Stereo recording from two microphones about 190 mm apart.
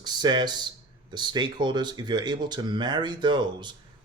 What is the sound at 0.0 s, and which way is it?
Speech, 20° right (ahead or behind).